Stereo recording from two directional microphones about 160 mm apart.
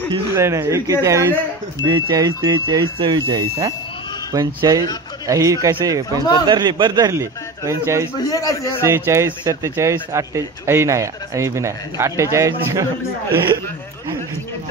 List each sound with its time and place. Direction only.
0.1 s speech: 15° right (ahead or behind)
8.2 s a man's voice: 20° left (ahead or behind)
8.8 s speech: 15° right (ahead or behind)